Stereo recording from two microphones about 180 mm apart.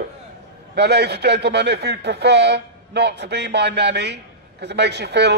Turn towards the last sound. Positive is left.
turn(degrees=-70)  # may be behind; listen again after turning